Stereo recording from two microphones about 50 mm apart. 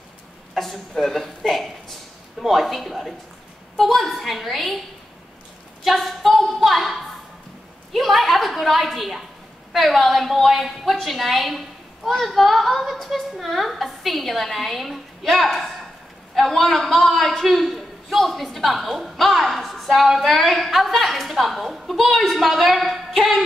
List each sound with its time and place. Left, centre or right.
0.6 s a man's voice: centre
5.9 s a man's voice: centre